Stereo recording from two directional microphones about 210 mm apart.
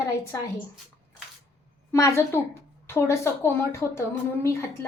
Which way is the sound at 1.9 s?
15° left (ahead or behind).